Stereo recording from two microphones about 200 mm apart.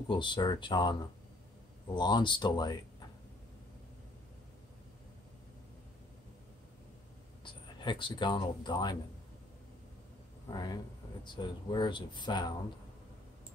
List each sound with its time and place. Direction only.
0.1 s speech: 25° left (ahead or behind)
2.0 s speech: 20° left (ahead or behind)
7.4 s speech: 25° left (ahead or behind)
10.5 s speech: 20° left (ahead or behind)